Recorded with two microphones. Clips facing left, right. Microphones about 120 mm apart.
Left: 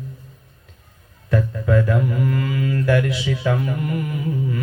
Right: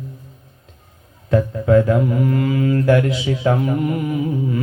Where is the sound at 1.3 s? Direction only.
25° right (ahead or behind).